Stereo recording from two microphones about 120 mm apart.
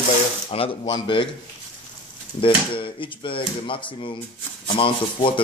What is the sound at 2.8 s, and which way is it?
Speech, 45° left (ahead or behind).